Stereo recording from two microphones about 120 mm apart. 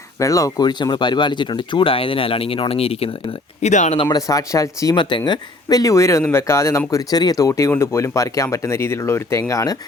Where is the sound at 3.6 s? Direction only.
80° left.